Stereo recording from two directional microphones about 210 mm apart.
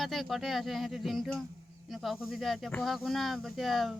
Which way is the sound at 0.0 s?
Centre (ahead or behind).